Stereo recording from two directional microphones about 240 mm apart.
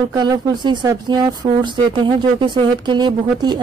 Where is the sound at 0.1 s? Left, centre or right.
Centre.